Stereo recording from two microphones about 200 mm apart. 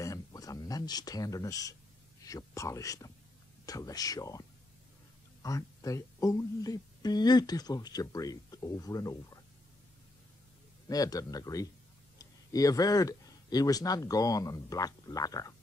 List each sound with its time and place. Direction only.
0.0 s speech: 15° left (ahead or behind)
10.9 s speech: 20° left (ahead or behind)